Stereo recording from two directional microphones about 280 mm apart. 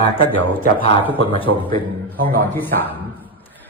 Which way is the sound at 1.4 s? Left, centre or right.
Centre.